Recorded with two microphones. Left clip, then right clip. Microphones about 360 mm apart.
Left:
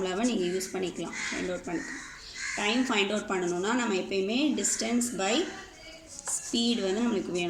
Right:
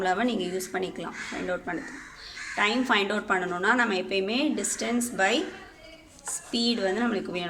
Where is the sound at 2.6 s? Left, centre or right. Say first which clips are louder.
Right 4 dB; right.